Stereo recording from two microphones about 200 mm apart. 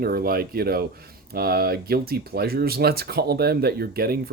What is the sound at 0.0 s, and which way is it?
Speech, 50° right (ahead or behind).